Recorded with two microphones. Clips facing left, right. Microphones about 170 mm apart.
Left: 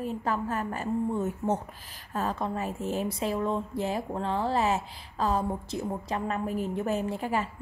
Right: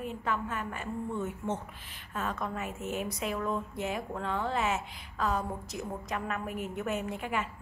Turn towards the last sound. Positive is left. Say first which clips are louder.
# left 4 dB
turn(degrees=35)  # may be behind; listen again after turning